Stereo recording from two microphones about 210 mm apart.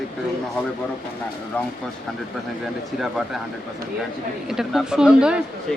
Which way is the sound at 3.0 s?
Centre (ahead or behind).